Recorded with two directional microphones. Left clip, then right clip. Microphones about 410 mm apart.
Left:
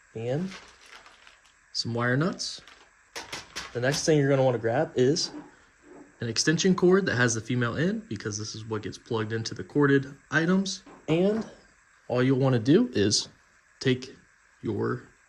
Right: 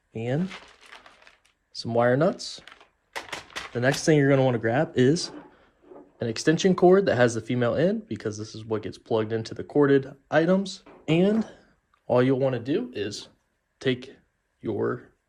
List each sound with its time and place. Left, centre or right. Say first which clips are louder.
1.7 s speech: right 5 dB; centre
3.8 s speech: right 2 dB; centre
6.1 s speech: right 2 dB; centre
11.0 s speech: right 2 dB; right
12.1 s speech: right 4 dB; centre
12.4 s speech: left 2 dB; centre
13.7 s speech: even; centre